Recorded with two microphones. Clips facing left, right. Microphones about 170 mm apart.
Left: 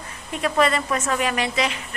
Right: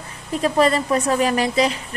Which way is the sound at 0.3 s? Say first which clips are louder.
Right 3 dB; 35° right (ahead or behind).